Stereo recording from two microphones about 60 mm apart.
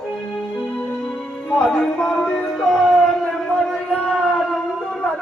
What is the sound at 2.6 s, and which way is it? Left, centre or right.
Howl, centre.